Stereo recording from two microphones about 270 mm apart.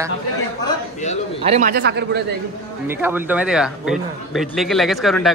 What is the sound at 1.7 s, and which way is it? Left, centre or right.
Speech, right.